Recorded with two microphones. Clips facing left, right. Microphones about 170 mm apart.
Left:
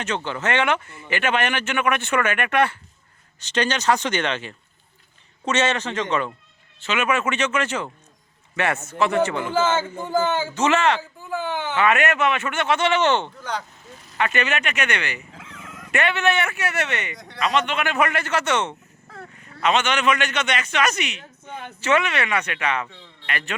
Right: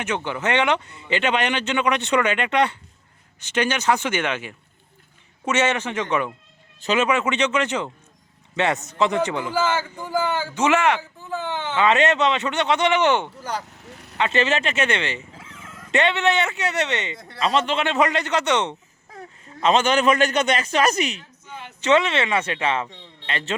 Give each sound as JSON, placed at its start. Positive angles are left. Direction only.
{"t": 0.0, "sound": "speech", "side_deg": -10}
{"t": 6.8, "sound": "a man's voice", "side_deg": -35}
{"t": 7.1, "sound": "speech", "side_deg": -15}
{"t": 9.6, "sound": "speech", "side_deg": 25}
{"t": 10.5, "sound": "speech", "side_deg": -10}
{"t": 11.2, "sound": "a sound", "side_deg": 10}
{"t": 11.6, "sound": "speech", "side_deg": -20}
{"t": 13.8, "sound": "vehicle", "side_deg": -70}
{"t": 14.2, "sound": "speech", "side_deg": -25}
{"t": 19.1, "sound": "a sound", "side_deg": -20}
{"t": 19.6, "sound": "a man's voice", "side_deg": -30}
{"t": 21.4, "sound": "speech", "side_deg": 55}
{"t": 21.8, "sound": "speech", "side_deg": -20}